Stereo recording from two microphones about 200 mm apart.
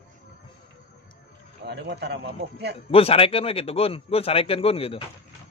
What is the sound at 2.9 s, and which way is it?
A man's voice, 30° left (ahead or behind).